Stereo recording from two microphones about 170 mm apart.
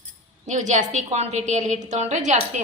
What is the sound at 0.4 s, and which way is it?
A woman's voice, 45° right (ahead or behind).